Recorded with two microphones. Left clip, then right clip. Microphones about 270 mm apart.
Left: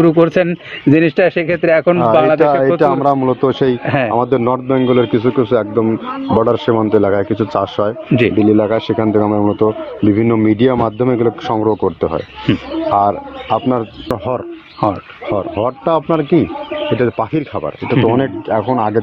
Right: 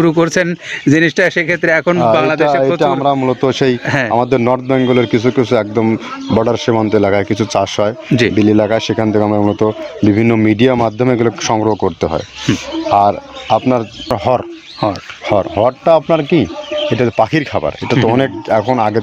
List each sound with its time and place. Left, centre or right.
0.0 s speech: right
4.1 s a man's voice: right
12.5 s speech: right
12.9 s a man's voice: right